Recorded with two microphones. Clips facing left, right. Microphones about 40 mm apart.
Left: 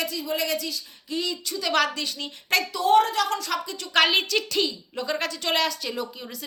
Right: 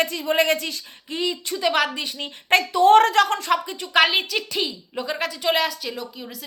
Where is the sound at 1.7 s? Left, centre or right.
Centre.